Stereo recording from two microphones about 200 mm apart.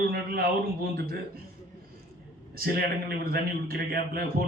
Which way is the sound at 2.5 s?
50° right (ahead or behind).